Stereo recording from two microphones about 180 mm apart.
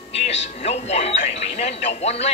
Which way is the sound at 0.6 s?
35° left (ahead or behind).